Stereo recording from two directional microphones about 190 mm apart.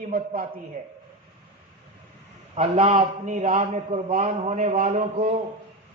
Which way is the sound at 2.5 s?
35° right (ahead or behind).